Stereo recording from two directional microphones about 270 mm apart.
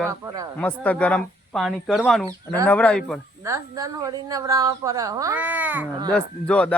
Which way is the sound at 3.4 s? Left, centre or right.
Centre.